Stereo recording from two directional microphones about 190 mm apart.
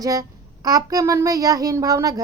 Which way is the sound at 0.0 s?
20° right (ahead or behind).